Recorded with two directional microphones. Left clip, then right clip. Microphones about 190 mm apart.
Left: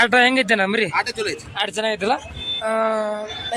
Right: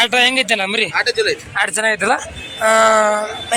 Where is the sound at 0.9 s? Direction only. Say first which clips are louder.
Right 6 dB; 60° left (ahead or behind).